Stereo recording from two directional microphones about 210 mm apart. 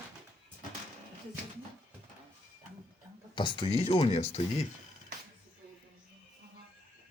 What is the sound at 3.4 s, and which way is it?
Speech, 25° left (ahead or behind).